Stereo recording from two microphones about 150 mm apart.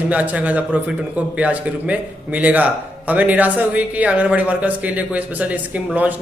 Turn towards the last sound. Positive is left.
turn(degrees=-10)  # may be behind; listen again after turning